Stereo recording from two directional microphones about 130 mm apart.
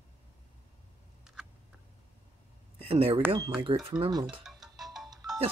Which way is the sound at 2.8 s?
50° right (ahead or behind).